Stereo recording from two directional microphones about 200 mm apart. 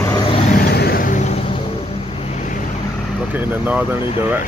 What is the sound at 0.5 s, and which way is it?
Vehicle, 50° left (ahead or behind).